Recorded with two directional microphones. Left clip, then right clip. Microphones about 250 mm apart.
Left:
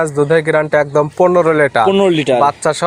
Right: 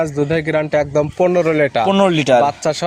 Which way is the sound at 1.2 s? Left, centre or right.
Centre.